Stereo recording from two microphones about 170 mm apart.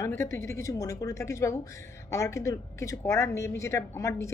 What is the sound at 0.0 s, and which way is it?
Speech, 15° left (ahead or behind).